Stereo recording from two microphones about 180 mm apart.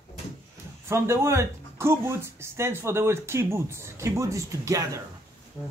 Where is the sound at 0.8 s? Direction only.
15° right (ahead or behind).